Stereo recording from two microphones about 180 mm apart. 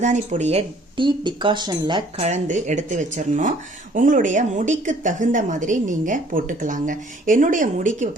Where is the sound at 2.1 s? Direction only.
40° right (ahead or behind).